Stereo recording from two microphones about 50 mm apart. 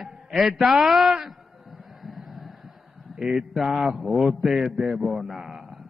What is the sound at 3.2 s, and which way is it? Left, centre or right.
A man's voice, centre.